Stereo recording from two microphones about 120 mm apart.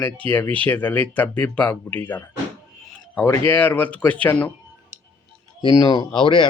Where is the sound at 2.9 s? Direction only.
15° left (ahead or behind).